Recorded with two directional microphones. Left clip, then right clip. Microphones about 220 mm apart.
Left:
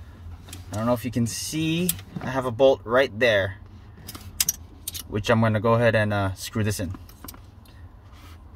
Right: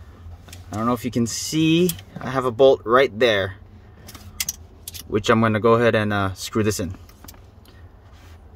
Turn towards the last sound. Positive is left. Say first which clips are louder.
# right 7 dB
turn(degrees=-45)  # may be behind; listen again after turning